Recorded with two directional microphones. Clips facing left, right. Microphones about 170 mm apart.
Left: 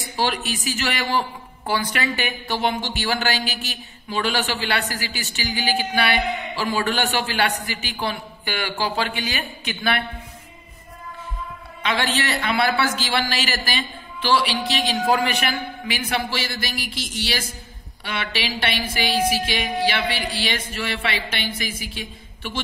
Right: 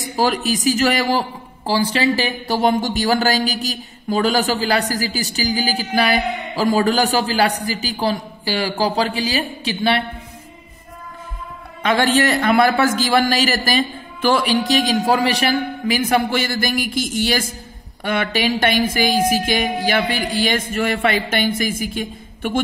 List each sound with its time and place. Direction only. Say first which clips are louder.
0.1 s speech: right 6 dB; 40° right (ahead or behind)
1.7 s speech: right 6 dB; 30° right (ahead or behind)
11.8 s a man's voice: right 7 dB; 45° right (ahead or behind)